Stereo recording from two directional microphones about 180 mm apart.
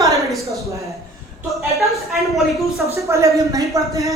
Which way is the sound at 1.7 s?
Centre (ahead or behind).